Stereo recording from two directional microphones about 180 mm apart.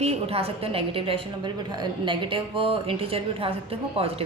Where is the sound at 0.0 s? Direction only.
35° right (ahead or behind).